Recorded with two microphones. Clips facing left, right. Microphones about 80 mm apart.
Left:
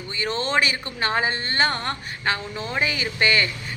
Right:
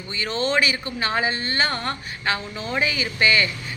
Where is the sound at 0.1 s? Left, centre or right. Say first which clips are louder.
Right 1 dB; left.